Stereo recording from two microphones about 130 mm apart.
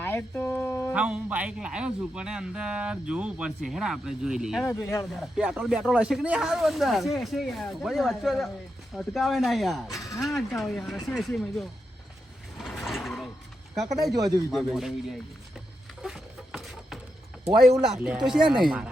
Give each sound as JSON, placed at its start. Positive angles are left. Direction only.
{"t": 0.0, "sound": "a sound", "side_deg": 15}
{"t": 0.9, "sound": "a man's voice", "side_deg": -10}
{"t": 4.6, "sound": "speech", "side_deg": 20}
{"t": 5.1, "sound": "speech", "side_deg": -5}
{"t": 9.9, "sound": "speech", "side_deg": 25}
{"t": 10.2, "sound": "speech", "side_deg": 0}
{"t": 12.5, "sound": "a sound", "side_deg": 0}
{"t": 14.0, "sound": "speech", "side_deg": -30}
{"t": 14.5, "sound": "speech", "side_deg": 0}
{"t": 16.0, "sound": "a sound", "side_deg": -5}
{"t": 17.8, "sound": "speech", "side_deg": -5}